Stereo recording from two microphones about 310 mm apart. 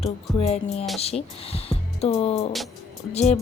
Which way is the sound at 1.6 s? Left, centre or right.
Centre.